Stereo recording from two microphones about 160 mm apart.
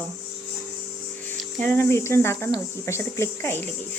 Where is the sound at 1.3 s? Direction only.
10° left (ahead or behind).